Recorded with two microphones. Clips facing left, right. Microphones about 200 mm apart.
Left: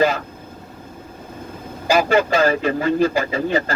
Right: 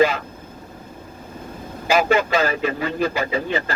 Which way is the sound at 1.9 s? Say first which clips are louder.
Left 2 dB; 40° left (ahead or behind).